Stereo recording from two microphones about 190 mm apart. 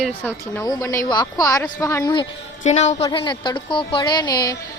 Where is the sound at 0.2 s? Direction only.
10° left (ahead or behind).